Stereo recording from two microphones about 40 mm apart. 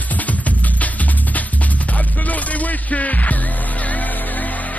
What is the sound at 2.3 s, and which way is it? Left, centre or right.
Music, left.